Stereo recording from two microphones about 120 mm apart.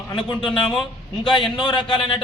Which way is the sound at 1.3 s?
40° left (ahead or behind).